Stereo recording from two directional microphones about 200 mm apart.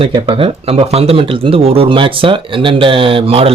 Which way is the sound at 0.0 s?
25° right (ahead or behind).